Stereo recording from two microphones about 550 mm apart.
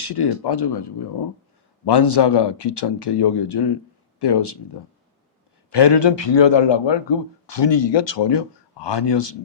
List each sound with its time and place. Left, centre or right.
0.1 s speech: left
5.7 s speech: left